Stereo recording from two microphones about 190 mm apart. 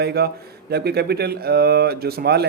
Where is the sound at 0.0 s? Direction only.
60° right (ahead or behind).